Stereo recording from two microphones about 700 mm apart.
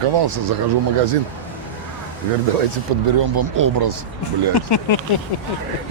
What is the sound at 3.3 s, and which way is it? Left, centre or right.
Speech, right.